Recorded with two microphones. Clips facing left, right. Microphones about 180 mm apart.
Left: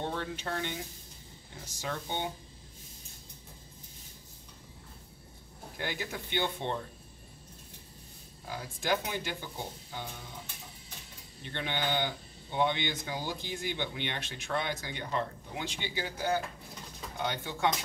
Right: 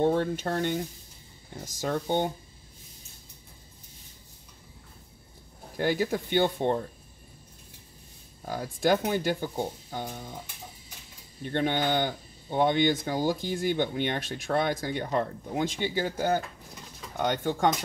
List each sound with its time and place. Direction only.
0.0 s speech: 45° right (ahead or behind)
5.8 s speech: 40° right (ahead or behind)
8.5 s speech: 45° right (ahead or behind)
11.4 s speech: 45° right (ahead or behind)